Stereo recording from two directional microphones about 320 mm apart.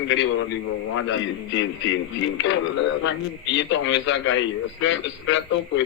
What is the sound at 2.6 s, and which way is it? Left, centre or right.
Speech, left.